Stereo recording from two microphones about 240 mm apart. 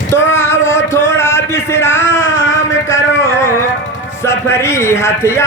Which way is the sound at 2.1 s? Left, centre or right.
Left.